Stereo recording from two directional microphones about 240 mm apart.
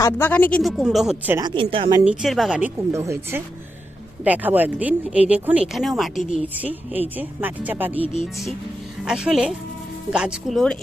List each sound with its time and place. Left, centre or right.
0.0 s speech: centre
1.4 s speech: centre
2.0 s speech: centre
6.1 s a woman's voice: left
6.5 s speech: centre